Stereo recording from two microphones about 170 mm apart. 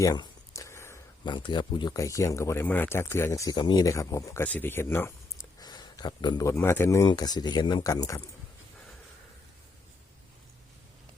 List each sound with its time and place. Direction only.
0.0 s a sound: 20° left (ahead or behind)
1.2 s speech: 25° left (ahead or behind)
5.5 s speech: 25° left (ahead or behind)